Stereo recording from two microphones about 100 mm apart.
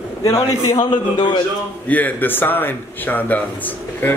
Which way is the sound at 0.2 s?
35° left (ahead or behind).